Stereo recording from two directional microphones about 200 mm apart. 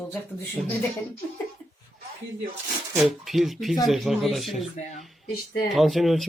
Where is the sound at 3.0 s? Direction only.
Centre (ahead or behind).